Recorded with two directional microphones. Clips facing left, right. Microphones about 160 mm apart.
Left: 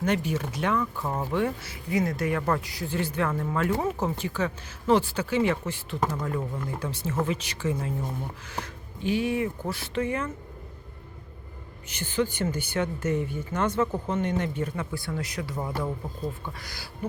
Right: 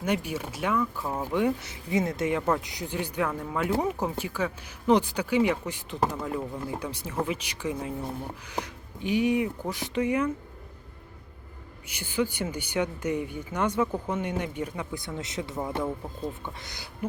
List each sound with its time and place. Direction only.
0.0 s speech: 10° right (ahead or behind)
11.9 s speech: 10° right (ahead or behind)